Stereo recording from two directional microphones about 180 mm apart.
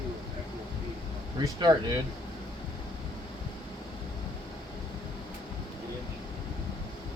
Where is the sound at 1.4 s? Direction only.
25° right (ahead or behind).